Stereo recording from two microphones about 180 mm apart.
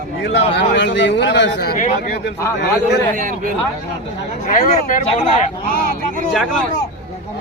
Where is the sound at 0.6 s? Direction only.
75° left (ahead or behind).